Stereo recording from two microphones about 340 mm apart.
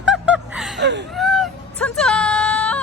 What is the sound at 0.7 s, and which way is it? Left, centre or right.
Speech, right.